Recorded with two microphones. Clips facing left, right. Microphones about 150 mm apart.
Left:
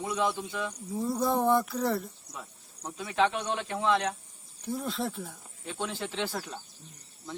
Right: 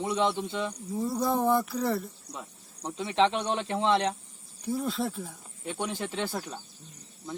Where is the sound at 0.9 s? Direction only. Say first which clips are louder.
Even; centre (ahead or behind).